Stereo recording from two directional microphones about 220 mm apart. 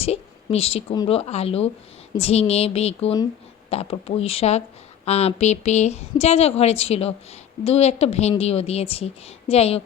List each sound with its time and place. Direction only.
0.0 s a woman's voice: 25° left (ahead or behind)